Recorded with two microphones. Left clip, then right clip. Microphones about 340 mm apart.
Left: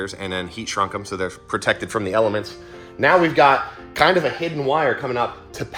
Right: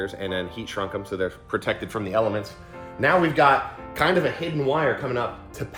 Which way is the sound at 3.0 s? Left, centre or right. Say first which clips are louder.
Left 4 dB; centre.